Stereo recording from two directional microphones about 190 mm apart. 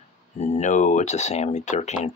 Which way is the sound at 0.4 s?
35° left (ahead or behind).